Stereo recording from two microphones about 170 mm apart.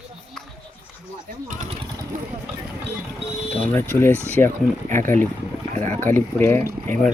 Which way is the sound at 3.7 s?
15° left (ahead or behind).